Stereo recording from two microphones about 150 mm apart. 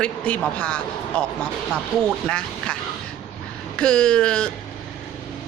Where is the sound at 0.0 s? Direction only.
5° left (ahead or behind).